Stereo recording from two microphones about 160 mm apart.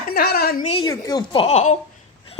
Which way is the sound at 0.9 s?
25° left (ahead or behind).